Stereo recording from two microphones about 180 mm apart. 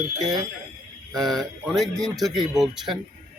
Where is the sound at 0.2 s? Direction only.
20° right (ahead or behind).